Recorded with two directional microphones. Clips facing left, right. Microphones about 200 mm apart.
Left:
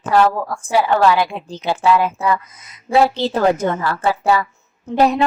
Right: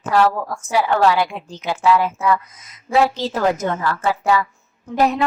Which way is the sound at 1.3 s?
30° left (ahead or behind).